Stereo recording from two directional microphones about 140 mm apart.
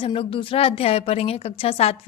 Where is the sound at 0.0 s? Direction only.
40° left (ahead or behind).